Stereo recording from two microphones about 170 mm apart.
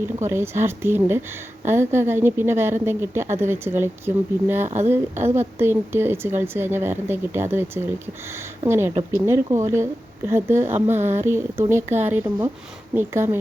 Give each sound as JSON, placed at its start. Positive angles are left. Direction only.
{"t": 0.2, "sound": "a woman's voice", "side_deg": -15}